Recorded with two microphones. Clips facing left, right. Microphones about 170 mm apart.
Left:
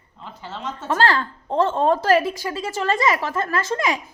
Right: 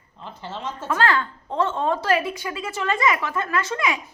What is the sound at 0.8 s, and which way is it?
A woman's voice, 35° left (ahead or behind).